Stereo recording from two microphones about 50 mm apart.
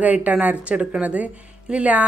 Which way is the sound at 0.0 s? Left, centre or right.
Right.